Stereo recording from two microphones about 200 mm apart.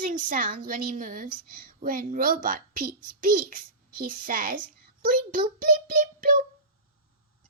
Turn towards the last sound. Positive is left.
turn(degrees=-45)  # may be behind; listen again after turning